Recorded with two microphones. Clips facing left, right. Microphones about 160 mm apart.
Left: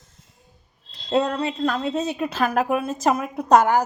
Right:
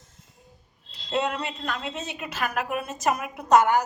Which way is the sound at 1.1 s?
35° left (ahead or behind).